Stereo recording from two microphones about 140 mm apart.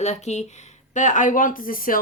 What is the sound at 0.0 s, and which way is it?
Speech, 55° left (ahead or behind).